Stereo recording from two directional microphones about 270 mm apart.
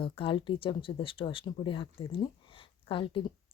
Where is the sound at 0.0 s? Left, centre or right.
Centre.